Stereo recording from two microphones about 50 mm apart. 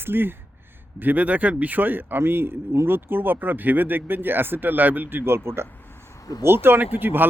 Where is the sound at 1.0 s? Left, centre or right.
Right.